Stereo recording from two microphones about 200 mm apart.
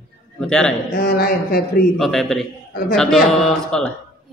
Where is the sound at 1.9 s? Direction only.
Centre (ahead or behind).